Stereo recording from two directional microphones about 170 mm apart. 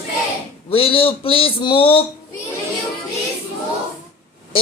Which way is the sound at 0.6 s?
35° left (ahead or behind).